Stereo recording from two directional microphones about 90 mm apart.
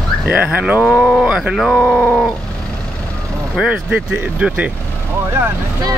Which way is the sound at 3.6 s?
15° right (ahead or behind).